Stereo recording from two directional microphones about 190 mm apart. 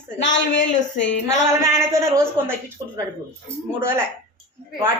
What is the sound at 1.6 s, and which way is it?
Speech, 15° right (ahead or behind).